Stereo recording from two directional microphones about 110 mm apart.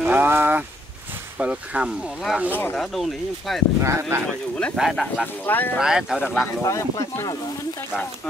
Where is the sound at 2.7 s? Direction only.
Centre (ahead or behind).